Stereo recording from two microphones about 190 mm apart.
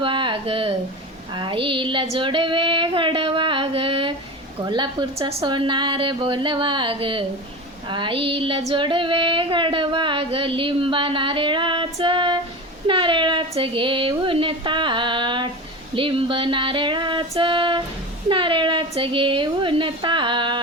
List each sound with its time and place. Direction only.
0.0 s a sound: 25° right (ahead or behind)
1.3 s female singing: 25° right (ahead or behind)
12.9 s speech: 25° right (ahead or behind)
16.0 s music: 30° right (ahead or behind)
18.3 s a woman's voice: 25° right (ahead or behind)